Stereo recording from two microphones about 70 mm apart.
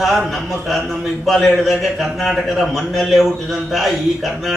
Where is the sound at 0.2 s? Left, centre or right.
Centre.